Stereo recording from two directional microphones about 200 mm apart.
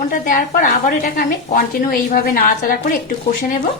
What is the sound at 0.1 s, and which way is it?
Speech, 40° left (ahead or behind).